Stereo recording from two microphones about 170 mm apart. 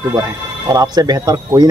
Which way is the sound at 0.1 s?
20° right (ahead or behind).